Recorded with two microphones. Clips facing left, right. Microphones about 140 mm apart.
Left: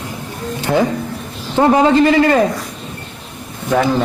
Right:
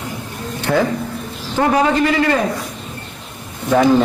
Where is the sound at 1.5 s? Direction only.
25° left (ahead or behind).